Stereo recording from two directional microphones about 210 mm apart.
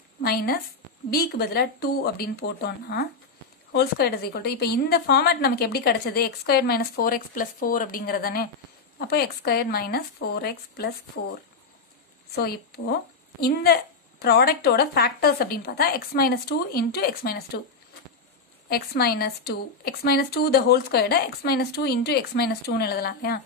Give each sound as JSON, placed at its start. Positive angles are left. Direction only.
{"t": 0.2, "sound": "a woman's voice", "side_deg": 45}
{"t": 12.4, "sound": "a woman's voice", "side_deg": 45}
{"t": 18.7, "sound": "a woman's voice", "side_deg": 50}